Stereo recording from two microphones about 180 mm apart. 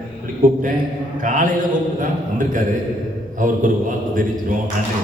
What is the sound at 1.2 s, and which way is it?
A man's voice, 45° right (ahead or behind).